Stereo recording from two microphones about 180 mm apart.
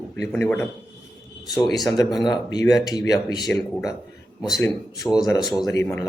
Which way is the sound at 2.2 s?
20° left (ahead or behind).